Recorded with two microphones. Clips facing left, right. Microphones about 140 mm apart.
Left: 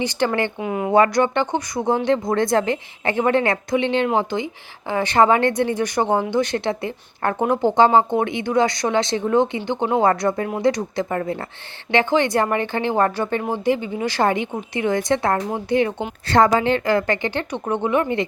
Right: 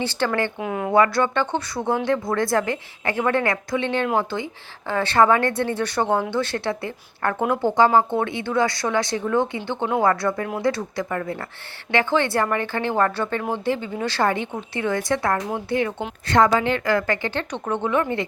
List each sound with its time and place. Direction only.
0.0 s a woman's voice: 15° left (ahead or behind)
0.6 s speech: 5° left (ahead or behind)
0.9 s a woman's voice: 20° left (ahead or behind)
16.2 s a woman's voice: 35° left (ahead or behind)